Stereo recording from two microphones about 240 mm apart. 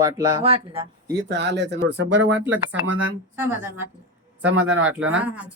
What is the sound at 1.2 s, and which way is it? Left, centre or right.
Speech, right.